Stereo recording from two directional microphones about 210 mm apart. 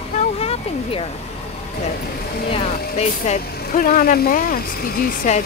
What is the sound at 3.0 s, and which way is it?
Speech, 35° left (ahead or behind).